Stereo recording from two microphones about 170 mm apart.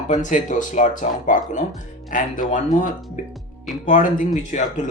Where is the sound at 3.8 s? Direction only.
50° left (ahead or behind).